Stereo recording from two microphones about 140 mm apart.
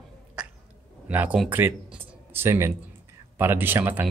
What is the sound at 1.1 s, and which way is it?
Speech, 10° right (ahead or behind).